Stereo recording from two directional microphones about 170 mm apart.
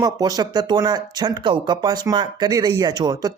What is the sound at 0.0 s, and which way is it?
Speech, 20° right (ahead or behind).